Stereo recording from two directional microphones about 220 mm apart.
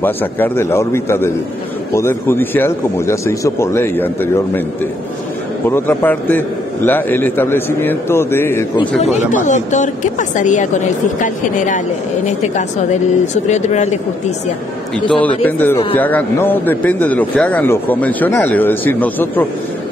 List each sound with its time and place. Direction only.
0.0 s a man's voice: 10° left (ahead or behind)
5.7 s a man's voice: 10° left (ahead or behind)
9.0 s a woman's voice: 30° left (ahead or behind)
15.0 s a man's voice: 5° left (ahead or behind)